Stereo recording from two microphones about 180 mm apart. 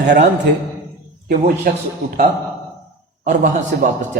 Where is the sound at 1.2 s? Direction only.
50° right (ahead or behind).